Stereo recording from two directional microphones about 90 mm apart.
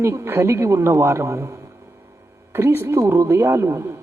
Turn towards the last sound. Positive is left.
turn(degrees=-30)  # may be behind; listen again after turning